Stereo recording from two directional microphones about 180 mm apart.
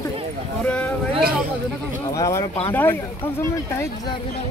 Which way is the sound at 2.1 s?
15° left (ahead or behind).